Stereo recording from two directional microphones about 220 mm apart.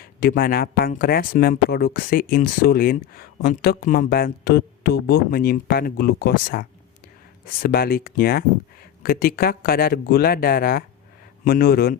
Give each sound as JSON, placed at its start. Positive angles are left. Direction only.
{"t": 0.0, "sound": "speech", "side_deg": 40}